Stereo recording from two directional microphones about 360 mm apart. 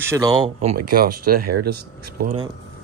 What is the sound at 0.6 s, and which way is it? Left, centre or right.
Speech, right.